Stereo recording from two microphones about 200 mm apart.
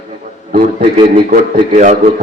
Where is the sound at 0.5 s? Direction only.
25° right (ahead or behind).